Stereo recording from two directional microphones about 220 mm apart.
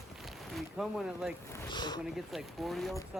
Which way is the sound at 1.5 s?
15° left (ahead or behind).